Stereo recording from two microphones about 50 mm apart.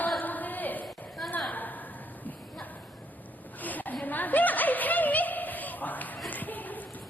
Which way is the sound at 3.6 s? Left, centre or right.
Left.